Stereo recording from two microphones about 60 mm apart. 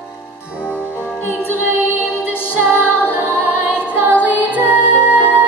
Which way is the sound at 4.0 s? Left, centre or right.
Right.